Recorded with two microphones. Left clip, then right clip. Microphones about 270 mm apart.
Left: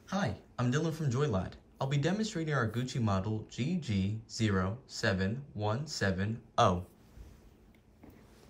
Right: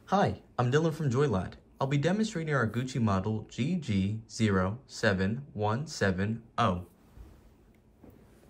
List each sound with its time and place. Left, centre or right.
0.0 s speech: centre